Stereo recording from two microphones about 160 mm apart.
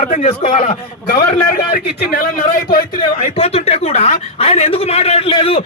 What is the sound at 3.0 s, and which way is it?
Speech, 40° left (ahead or behind).